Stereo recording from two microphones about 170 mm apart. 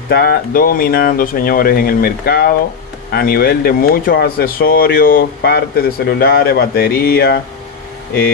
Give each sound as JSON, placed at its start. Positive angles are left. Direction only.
{"t": 0.1, "sound": "speech", "side_deg": 65}